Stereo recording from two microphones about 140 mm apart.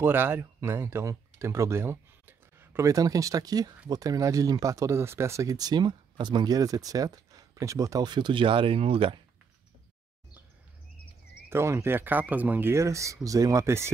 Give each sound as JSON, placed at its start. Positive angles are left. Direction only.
{"t": 0.0, "sound": "speech", "side_deg": -15}
{"t": 11.4, "sound": "speech", "side_deg": -20}